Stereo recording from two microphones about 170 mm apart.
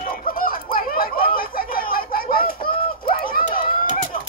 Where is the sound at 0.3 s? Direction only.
55° left (ahead or behind).